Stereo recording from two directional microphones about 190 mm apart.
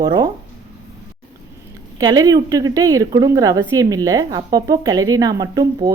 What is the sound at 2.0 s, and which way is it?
A woman's voice, 20° right (ahead or behind).